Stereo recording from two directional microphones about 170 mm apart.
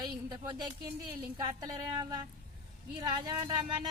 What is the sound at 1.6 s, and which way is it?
Speech, 25° right (ahead or behind).